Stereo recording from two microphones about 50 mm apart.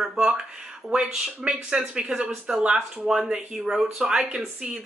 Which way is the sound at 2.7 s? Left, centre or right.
Centre.